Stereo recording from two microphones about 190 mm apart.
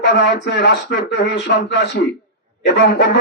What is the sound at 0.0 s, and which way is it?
A man's voice, 65° left (ahead or behind).